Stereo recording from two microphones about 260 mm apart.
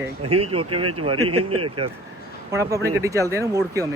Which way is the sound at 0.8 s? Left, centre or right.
Right.